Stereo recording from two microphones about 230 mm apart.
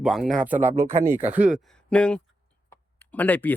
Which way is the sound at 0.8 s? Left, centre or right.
Centre.